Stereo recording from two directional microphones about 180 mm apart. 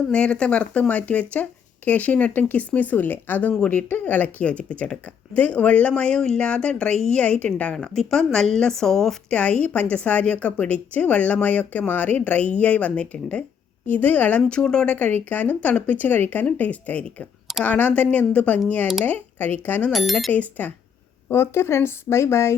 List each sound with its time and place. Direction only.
0.1 s speech: 5° left (ahead or behind)